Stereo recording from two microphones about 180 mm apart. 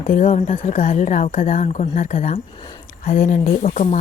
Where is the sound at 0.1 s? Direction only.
45° left (ahead or behind).